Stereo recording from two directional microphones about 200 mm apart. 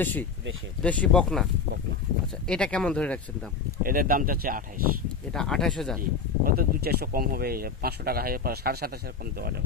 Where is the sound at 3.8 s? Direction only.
45° right (ahead or behind).